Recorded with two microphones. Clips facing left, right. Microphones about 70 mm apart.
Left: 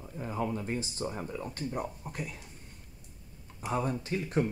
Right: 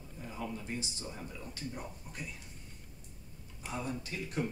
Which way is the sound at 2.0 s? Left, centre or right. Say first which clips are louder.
Left 6 dB; left.